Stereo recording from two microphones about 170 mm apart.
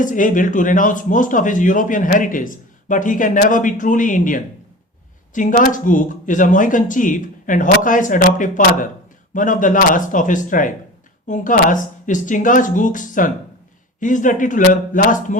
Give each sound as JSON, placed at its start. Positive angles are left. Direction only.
{"t": 0.0, "sound": "speech", "side_deg": 50}